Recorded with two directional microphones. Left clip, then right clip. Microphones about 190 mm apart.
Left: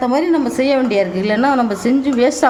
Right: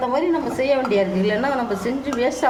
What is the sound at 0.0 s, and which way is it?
A woman's voice, 45° left (ahead or behind).